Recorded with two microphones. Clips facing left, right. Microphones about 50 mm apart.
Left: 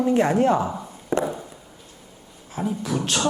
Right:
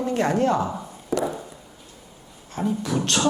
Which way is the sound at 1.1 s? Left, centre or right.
Left.